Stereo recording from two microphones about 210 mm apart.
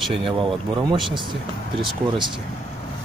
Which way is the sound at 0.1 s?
25° right (ahead or behind).